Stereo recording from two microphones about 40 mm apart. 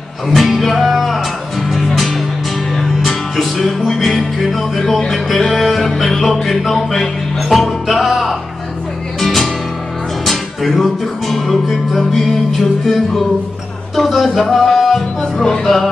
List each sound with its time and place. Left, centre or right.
0.3 s music: centre